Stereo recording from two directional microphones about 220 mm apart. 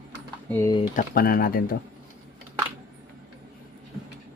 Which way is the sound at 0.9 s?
40° left (ahead or behind).